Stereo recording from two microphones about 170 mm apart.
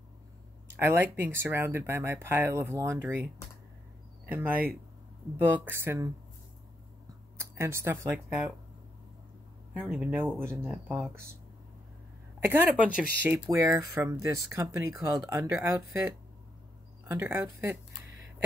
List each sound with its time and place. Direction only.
0.7 s speech: 15° right (ahead or behind)
4.3 s speech: 10° right (ahead or behind)
7.3 s speech: 15° right (ahead or behind)
9.8 s speech: 5° right (ahead or behind)
10.4 s speech: 15° right (ahead or behind)
10.7 s speech: centre (ahead or behind)
12.4 s speech: 10° right (ahead or behind)
17.1 s speech: 15° right (ahead or behind)